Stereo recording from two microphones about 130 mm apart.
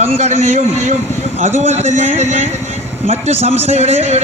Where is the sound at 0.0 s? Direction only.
55° right (ahead or behind).